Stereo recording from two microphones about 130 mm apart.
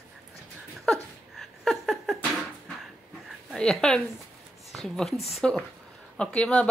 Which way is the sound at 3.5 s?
5° left (ahead or behind).